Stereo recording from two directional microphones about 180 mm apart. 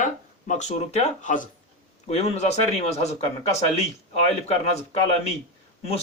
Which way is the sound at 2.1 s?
35° left (ahead or behind).